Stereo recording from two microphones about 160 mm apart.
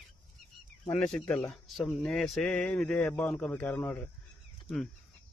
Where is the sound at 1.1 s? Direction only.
5° left (ahead or behind).